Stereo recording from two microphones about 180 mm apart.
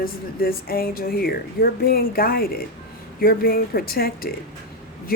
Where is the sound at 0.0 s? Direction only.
55° left (ahead or behind).